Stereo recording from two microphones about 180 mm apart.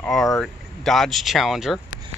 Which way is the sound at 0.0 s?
Centre (ahead or behind).